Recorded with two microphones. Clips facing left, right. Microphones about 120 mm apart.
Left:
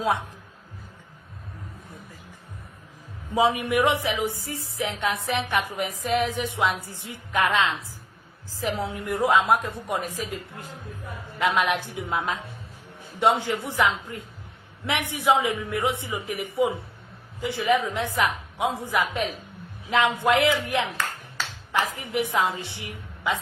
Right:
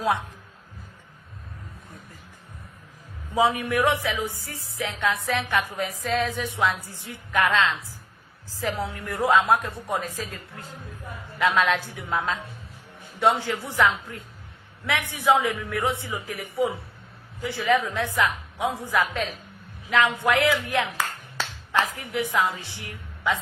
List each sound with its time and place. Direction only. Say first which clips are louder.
3.3 s music: left 1 dB; 20° left (ahead or behind)
8.6 s a woman's voice: left 1 dB; 15° left (ahead or behind)
13.1 s music: even; 15° left (ahead or behind)
21.9 s music: even; 25° left (ahead or behind)